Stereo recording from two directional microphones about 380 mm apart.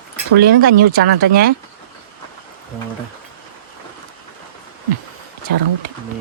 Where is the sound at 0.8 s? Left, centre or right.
Right.